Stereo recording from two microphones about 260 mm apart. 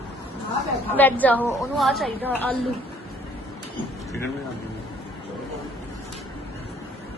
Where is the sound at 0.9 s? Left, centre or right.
Centre.